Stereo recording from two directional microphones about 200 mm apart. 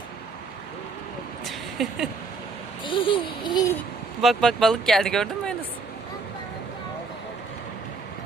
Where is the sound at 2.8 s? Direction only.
25° left (ahead or behind).